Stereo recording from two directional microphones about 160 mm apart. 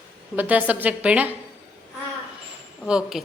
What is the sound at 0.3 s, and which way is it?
Speech, 10° right (ahead or behind).